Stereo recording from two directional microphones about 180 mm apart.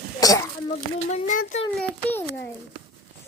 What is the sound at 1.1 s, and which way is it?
Speech, 40° left (ahead or behind).